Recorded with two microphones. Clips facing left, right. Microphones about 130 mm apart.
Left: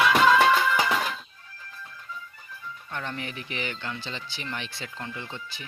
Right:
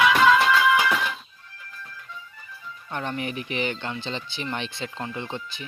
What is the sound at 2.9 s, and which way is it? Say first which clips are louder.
Speech: right 5 dB; 20° right (ahead or behind).